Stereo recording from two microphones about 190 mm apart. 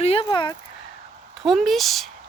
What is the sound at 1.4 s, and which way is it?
Speech, centre (ahead or behind).